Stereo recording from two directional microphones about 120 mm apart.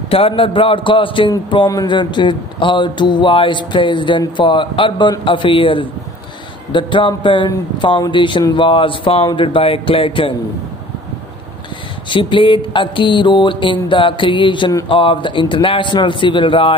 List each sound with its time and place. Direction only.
0.1 s mantra: 50° left (ahead or behind)
1.7 s speech: 35° left (ahead or behind)
5.2 s mantra: 45° left (ahead or behind)
12.1 s mantra: 45° left (ahead or behind)